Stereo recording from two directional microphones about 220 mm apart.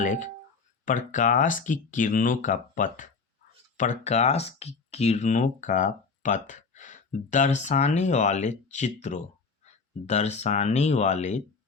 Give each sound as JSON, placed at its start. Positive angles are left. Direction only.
{"t": 0.0, "sound": "speech", "side_deg": 35}